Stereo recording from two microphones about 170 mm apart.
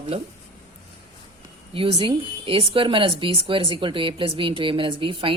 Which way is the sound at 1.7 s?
35° right (ahead or behind).